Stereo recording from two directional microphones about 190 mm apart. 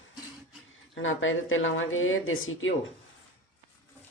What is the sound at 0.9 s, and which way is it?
Speech, 90° left.